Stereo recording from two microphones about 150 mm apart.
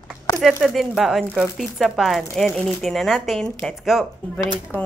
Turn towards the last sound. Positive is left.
turn(degrees=15)  # may be behind; listen again after turning